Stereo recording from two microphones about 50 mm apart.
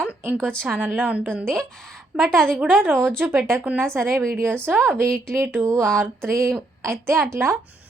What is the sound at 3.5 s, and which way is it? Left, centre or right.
Speech, right.